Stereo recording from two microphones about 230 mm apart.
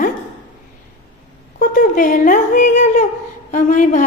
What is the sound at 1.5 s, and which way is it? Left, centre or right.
A woman's voice, left.